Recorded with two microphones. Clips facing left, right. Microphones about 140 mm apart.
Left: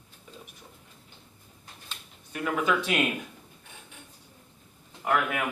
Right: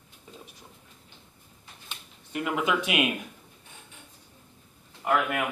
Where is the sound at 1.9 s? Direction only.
20° right (ahead or behind).